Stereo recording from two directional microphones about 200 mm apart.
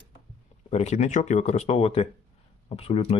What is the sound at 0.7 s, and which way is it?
Speech, 35° left (ahead or behind).